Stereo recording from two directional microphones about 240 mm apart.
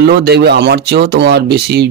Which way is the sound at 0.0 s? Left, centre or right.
Right.